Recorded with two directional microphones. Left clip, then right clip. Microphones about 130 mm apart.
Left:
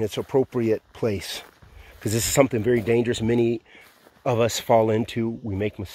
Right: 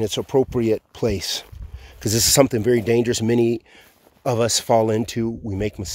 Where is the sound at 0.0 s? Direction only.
35° right (ahead or behind).